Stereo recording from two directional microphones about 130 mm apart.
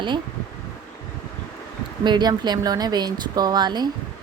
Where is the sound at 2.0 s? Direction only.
35° right (ahead or behind).